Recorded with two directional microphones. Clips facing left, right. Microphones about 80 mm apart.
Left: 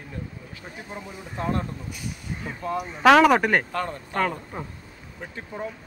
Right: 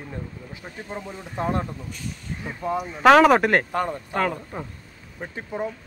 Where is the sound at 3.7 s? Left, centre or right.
Right.